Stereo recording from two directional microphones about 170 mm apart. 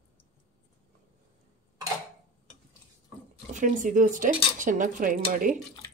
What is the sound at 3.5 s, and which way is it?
Speech, 50° right (ahead or behind).